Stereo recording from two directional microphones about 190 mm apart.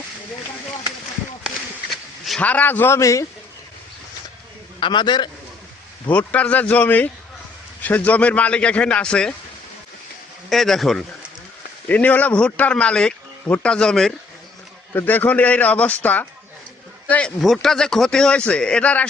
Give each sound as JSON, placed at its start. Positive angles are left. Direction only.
{"t": 1.5, "sound": "a sound", "side_deg": 0}
{"t": 4.8, "sound": "a man's voice", "side_deg": 25}
{"t": 6.1, "sound": "speech", "side_deg": 5}
{"t": 10.5, "sound": "a man's voice", "side_deg": 0}